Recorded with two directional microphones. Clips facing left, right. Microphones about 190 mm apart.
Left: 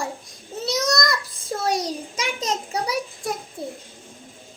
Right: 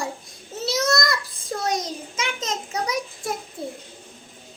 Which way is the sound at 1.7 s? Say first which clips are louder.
Left 2 dB; 35° left (ahead or behind).